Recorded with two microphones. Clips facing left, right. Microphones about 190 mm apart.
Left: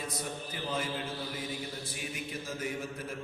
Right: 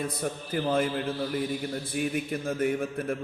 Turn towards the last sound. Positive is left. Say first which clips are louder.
# right 9 dB
turn(degrees=-60)  # may be behind; listen again after turning